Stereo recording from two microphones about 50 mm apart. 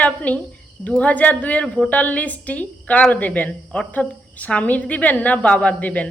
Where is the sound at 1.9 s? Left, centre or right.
Left.